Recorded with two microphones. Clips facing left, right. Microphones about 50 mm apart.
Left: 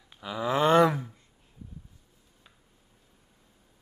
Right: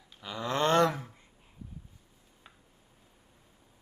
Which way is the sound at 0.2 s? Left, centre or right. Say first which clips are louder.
Left 4 dB; centre.